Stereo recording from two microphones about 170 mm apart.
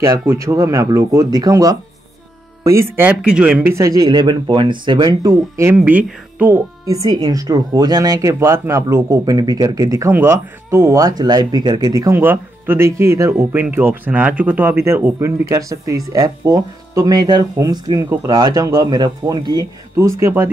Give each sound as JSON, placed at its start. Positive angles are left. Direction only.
{"t": 0.0, "sound": "speech", "side_deg": -15}